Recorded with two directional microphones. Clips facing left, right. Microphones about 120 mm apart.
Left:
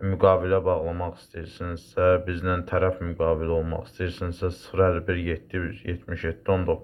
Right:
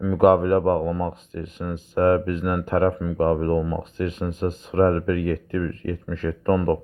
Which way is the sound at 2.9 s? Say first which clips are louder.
Right 4 dB; 20° right (ahead or behind).